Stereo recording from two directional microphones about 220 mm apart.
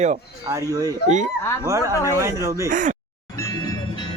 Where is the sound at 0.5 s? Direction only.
15° right (ahead or behind).